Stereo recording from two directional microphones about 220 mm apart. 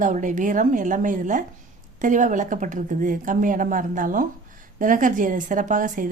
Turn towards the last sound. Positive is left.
turn(degrees=-35)  # may be behind; listen again after turning